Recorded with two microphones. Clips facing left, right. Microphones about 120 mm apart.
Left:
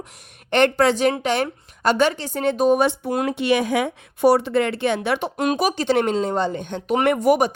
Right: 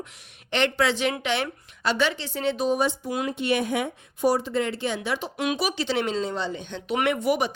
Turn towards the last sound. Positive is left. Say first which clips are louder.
# left 6 dB
turn(degrees=45)  # may be behind; listen again after turning